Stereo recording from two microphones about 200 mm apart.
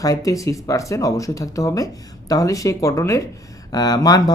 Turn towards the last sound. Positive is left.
turn(degrees=20)  # may be behind; listen again after turning